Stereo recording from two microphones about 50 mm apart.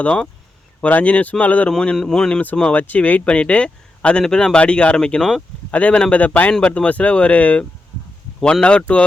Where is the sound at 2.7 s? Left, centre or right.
Left.